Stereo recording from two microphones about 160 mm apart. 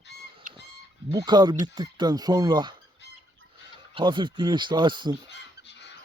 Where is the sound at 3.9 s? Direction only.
30° right (ahead or behind).